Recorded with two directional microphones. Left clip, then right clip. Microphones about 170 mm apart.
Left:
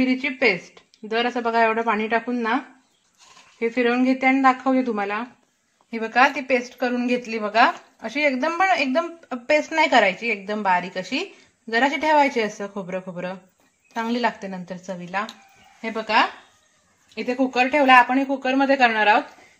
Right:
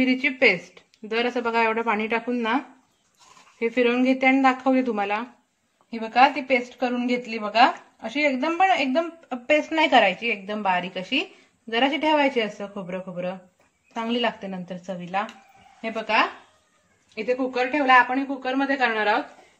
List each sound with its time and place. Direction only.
0.0 s a woman's voice: 15° left (ahead or behind)
15.8 s a woman's voice: 20° left (ahead or behind)
17.1 s speech: 50° left (ahead or behind)